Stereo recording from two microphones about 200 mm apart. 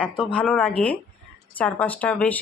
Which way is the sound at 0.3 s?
5° left (ahead or behind).